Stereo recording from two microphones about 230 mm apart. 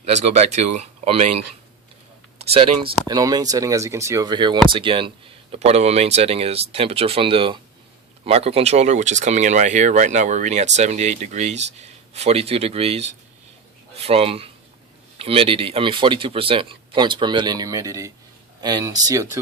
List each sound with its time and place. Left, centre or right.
0.0 s speech: right
2.4 s speech: right